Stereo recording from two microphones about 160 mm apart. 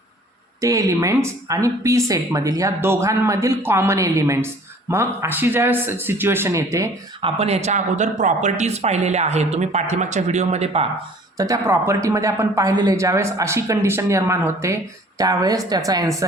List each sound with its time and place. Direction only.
0.6 s a man's voice: 20° right (ahead or behind)
7.2 s speech: 35° right (ahead or behind)
11.3 s a man's voice: 20° right (ahead or behind)